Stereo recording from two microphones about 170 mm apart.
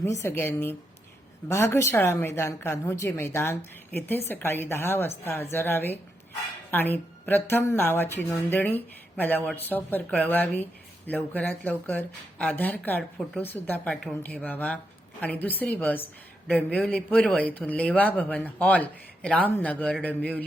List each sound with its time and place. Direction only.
0.0 s a woman's voice: 15° left (ahead or behind)